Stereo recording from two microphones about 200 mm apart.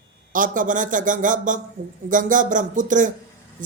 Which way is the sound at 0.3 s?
40° right (ahead or behind).